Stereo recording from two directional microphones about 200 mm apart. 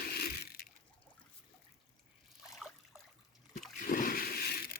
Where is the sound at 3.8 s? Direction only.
45° left (ahead or behind).